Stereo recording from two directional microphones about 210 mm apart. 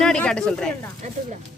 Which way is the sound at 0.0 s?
5° left (ahead or behind).